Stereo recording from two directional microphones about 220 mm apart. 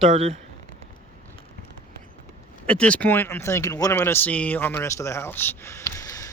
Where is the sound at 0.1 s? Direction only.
30° right (ahead or behind).